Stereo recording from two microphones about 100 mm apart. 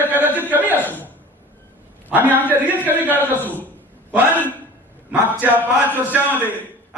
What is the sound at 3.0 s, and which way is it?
Speech, 20° left (ahead or behind).